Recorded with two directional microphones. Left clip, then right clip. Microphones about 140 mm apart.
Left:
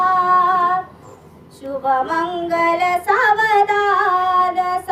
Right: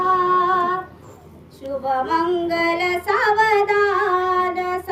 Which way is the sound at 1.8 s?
5° left (ahead or behind).